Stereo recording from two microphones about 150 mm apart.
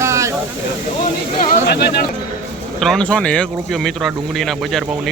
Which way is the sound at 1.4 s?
90° left.